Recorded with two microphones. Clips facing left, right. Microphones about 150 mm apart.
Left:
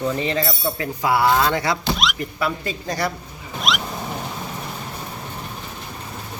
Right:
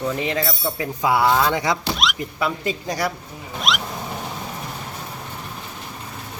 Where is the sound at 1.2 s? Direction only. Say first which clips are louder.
Left 1 dB; 5° left (ahead or behind).